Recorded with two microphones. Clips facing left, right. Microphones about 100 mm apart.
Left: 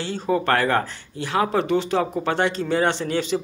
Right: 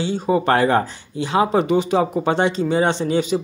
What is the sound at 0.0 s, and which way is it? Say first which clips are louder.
Speech: right 4 dB; 15° right (ahead or behind).